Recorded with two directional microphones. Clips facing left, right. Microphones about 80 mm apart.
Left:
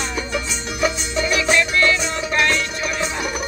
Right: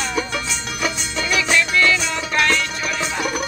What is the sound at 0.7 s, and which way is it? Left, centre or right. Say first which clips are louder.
Music: left 4 dB; left.